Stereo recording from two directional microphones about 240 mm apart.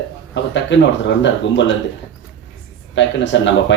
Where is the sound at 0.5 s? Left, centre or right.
Left.